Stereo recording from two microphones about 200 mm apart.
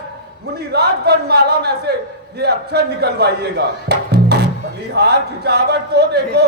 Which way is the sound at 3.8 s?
55° right (ahead or behind).